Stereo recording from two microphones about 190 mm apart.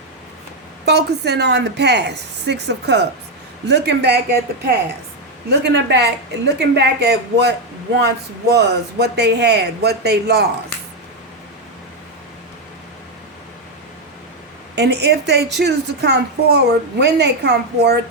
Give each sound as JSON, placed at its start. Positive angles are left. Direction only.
{"t": 0.9, "sound": "a woman's voice", "side_deg": -60}
{"t": 14.8, "sound": "a woman's voice", "side_deg": -65}